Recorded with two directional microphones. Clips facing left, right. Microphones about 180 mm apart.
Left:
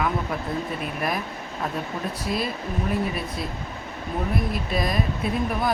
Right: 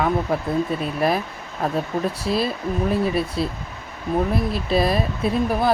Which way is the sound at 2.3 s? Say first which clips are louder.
Right 3 dB; 25° right (ahead or behind).